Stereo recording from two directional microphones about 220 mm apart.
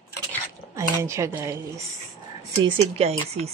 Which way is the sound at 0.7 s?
15° right (ahead or behind).